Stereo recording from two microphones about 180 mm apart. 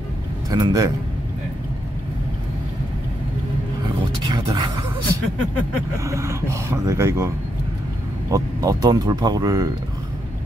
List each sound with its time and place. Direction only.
0.5 s speech: 20° right (ahead or behind)
4.3 s speech: 25° right (ahead or behind)